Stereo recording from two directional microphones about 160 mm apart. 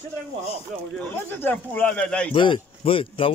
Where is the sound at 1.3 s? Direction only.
10° left (ahead or behind).